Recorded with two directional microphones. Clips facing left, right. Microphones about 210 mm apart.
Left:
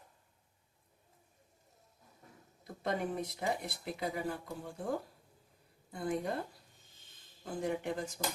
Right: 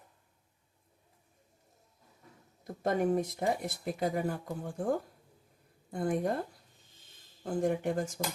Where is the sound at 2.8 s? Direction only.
45° right (ahead or behind).